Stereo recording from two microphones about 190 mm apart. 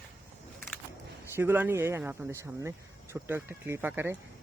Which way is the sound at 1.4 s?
10° right (ahead or behind).